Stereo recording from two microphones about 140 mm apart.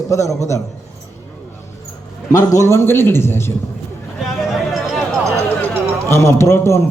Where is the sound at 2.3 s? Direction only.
20° left (ahead or behind).